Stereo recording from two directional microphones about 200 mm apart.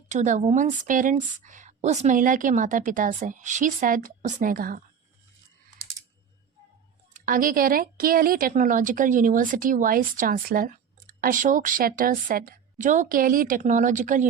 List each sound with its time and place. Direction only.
0.1 s a woman's voice: 35° right (ahead or behind)
7.1 s a woman's voice: 45° right (ahead or behind)